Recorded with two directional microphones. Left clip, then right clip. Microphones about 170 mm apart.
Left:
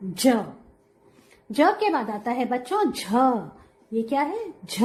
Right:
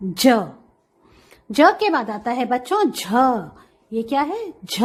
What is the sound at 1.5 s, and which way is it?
A woman's voice, 30° right (ahead or behind).